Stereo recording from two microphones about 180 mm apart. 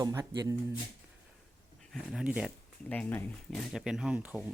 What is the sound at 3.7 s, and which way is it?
Speech, 5° right (ahead or behind).